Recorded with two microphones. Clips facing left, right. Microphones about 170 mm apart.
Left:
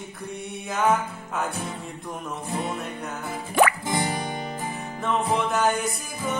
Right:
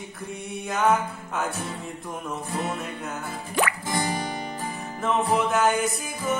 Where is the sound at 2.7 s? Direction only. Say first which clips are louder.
Even; centre (ahead or behind).